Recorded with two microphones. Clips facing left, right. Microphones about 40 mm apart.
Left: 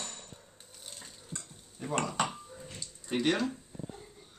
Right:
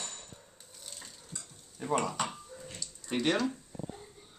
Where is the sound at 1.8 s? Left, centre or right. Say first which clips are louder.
Right 4 dB; right.